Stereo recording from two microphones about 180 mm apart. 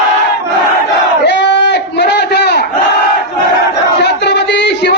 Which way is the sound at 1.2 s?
75° left (ahead or behind).